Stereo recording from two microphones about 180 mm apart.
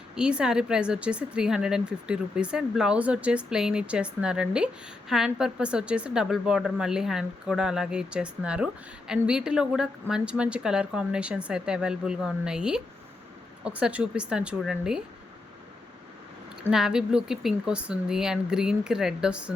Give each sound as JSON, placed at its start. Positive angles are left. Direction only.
{"t": 0.2, "sound": "speech", "side_deg": -5}
{"t": 16.6, "sound": "speech", "side_deg": -5}